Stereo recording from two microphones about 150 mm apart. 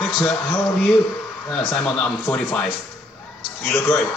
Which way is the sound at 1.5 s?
5° left (ahead or behind).